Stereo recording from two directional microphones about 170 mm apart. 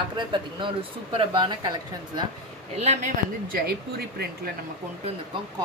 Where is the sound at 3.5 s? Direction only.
65° right (ahead or behind).